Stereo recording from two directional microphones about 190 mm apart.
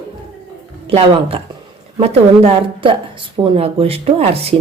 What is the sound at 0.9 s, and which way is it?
Speech, 30° right (ahead or behind).